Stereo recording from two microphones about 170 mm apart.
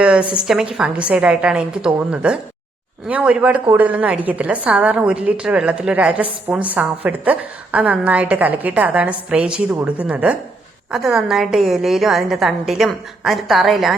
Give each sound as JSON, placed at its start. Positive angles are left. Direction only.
{"t": 0.0, "sound": "a woman's voice", "side_deg": -5}